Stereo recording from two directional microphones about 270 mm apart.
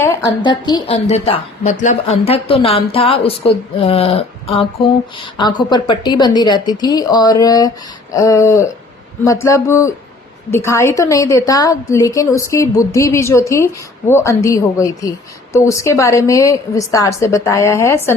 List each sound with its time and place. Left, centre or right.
0.0 s a woman's voice: centre